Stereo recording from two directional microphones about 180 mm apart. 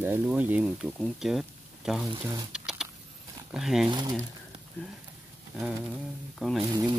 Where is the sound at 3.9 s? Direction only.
25° right (ahead or behind).